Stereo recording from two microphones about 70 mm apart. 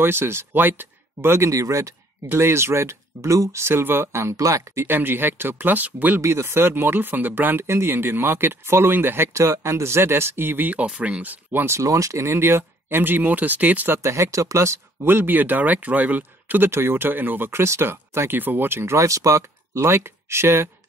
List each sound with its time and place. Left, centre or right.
0.0 s speech: right
1.5 s speech: right
2.2 s speech: right
4.4 s speech: right
4.8 s speech: right
6.2 s speech: right; by 11.3 s centre
11.5 s speech: right
11.8 s speech: right
14.0 s speech: right
15.0 s speech: right
18.9 s speech: right